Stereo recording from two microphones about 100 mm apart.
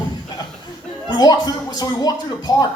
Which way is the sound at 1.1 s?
40° left (ahead or behind).